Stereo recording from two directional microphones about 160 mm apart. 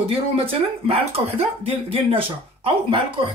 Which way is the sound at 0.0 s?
35° right (ahead or behind).